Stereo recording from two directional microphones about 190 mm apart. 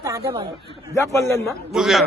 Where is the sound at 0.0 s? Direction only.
20° right (ahead or behind).